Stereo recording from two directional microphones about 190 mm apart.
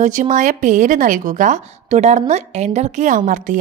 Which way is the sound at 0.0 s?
40° right (ahead or behind).